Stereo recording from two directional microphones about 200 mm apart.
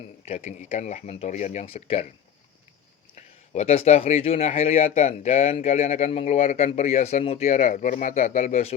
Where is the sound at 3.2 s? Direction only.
35° left (ahead or behind).